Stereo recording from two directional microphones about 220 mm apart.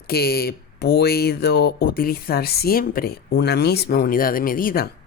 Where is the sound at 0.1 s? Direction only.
45° left (ahead or behind).